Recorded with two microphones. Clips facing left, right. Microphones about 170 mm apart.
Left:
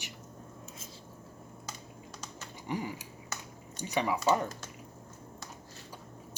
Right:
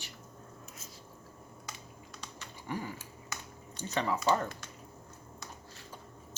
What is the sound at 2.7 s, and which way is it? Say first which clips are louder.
Speech: left 3 dB; 15° left (ahead or behind).